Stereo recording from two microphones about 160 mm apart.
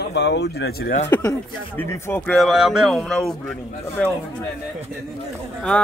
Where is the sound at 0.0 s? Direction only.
90° left; by 0.9 s 75° left (ahead or behind).